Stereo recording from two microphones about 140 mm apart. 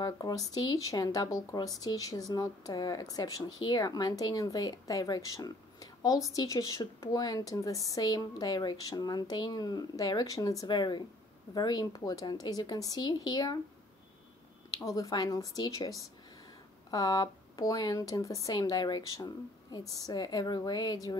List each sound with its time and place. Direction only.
0.0 s speech: 25° left (ahead or behind)
15.0 s speech: 25° left (ahead or behind)
16.9 s speech: 25° left (ahead or behind)